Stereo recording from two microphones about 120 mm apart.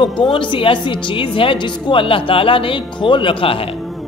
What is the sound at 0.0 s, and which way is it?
Speech, 40° left (ahead or behind).